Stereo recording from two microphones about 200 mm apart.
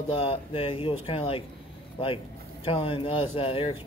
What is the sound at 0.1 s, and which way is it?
Speech, 25° left (ahead or behind).